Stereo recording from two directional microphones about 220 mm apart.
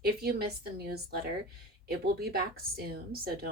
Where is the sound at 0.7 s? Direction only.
45° right (ahead or behind).